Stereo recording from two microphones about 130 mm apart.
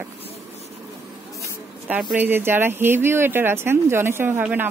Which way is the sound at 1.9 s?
10° right (ahead or behind).